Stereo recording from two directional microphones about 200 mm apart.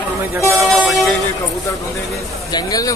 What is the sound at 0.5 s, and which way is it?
Vehicle, centre (ahead or behind).